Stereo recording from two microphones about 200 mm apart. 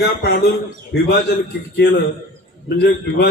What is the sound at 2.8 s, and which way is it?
Speech, 55° left (ahead or behind).